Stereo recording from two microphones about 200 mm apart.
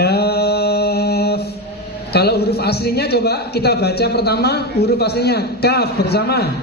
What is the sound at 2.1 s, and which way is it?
A man's voice, 55° left (ahead or behind).